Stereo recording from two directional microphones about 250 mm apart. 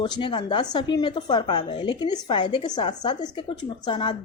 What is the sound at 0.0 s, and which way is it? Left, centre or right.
A woman's voice, centre.